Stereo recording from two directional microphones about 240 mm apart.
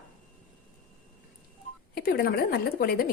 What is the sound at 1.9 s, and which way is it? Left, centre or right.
A woman's voice, left.